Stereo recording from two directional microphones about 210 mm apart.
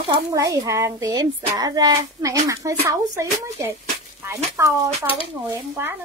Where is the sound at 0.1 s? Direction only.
15° right (ahead or behind).